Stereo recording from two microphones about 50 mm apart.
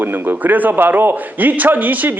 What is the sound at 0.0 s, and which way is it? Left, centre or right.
A man's voice, right.